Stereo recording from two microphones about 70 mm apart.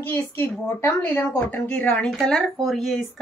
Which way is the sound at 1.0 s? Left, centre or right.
Left.